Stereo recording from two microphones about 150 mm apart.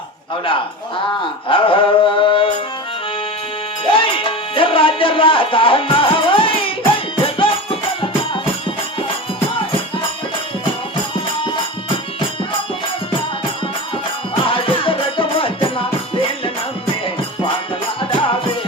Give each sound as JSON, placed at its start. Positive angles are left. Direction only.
{"t": 0.4, "sound": "speech", "side_deg": 35}
{"t": 3.8, "sound": "music", "side_deg": 35}
{"t": 14.4, "sound": "music", "side_deg": 35}
{"t": 18.1, "sound": "music", "side_deg": 35}